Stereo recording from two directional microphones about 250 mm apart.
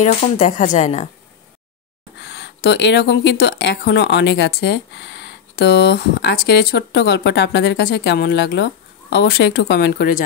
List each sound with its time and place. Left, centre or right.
0.0 s speech: left
2.1 s speech: left